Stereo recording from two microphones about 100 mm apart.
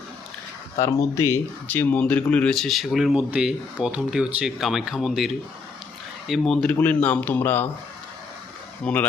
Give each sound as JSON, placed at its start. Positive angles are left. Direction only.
{"t": 1.1, "sound": "speech", "side_deg": 30}
{"t": 1.6, "sound": "speech", "side_deg": 20}
{"t": 2.6, "sound": "speech", "side_deg": 0}
{"t": 8.8, "sound": "speech", "side_deg": 15}